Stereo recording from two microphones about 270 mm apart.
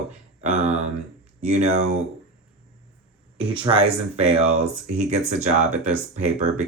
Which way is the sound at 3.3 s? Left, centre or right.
Centre.